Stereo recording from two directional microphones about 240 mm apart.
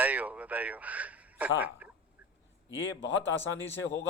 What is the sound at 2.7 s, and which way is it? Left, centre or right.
Speech, left.